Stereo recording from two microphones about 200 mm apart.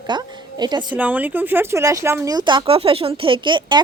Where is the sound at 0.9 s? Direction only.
10° right (ahead or behind).